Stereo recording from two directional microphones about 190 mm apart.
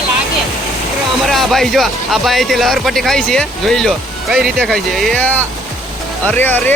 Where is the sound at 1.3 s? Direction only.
Centre (ahead or behind).